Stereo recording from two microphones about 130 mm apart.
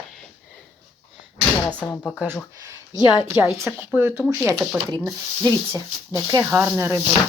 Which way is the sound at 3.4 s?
10° right (ahead or behind).